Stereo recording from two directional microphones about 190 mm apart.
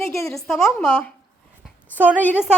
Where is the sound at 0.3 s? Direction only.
Centre (ahead or behind).